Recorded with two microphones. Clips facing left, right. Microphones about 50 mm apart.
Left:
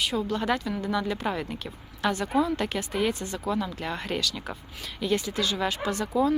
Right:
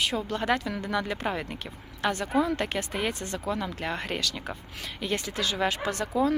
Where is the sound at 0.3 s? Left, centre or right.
Right.